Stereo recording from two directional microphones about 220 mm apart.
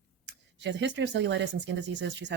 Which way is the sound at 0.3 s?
55° right (ahead or behind).